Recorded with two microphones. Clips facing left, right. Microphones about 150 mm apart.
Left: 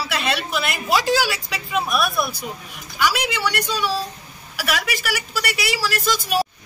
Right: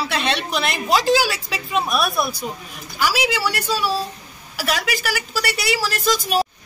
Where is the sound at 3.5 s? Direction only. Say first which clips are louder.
Right 1 dB; 35° right (ahead or behind).